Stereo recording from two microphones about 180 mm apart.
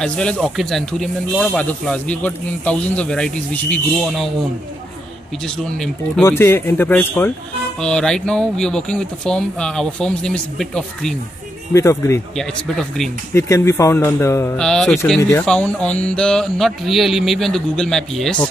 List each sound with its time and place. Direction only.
0.0 s speech: 5° left (ahead or behind)
5.6 s speech: 5° left (ahead or behind)
6.2 s speech: 15° left (ahead or behind)
11.7 s speech: 15° left (ahead or behind)
12.4 s speech: centre (ahead or behind)
13.3 s speech: 15° left (ahead or behind)
14.6 s speech: 5° left (ahead or behind)